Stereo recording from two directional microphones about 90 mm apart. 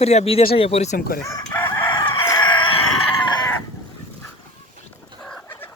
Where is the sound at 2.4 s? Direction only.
60° left (ahead or behind).